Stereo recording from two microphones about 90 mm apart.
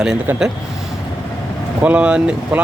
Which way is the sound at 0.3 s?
20° right (ahead or behind).